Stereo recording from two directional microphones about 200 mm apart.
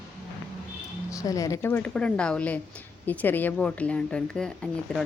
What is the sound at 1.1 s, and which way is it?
A woman's voice, 15° left (ahead or behind).